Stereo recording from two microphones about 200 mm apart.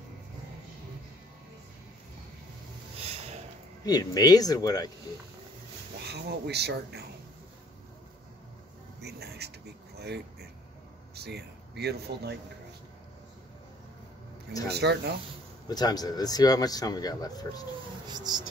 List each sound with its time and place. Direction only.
3.0 s a sound: 30° right (ahead or behind)
3.8 s speech: 20° left (ahead or behind)
6.0 s speech: 55° right (ahead or behind)
9.0 s speech: 55° right (ahead or behind)
9.9 s a sound: 55° right (ahead or behind)
11.1 s speech: 55° right (ahead or behind)
14.7 s speech: 55° right (ahead or behind)
15.7 s speech: 20° left (ahead or behind)
18.0 s speech: 20° right (ahead or behind)